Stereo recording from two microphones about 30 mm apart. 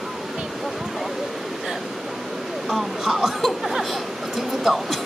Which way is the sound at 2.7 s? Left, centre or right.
Centre.